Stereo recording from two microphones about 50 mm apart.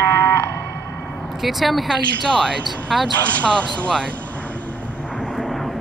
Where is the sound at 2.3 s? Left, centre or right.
Centre.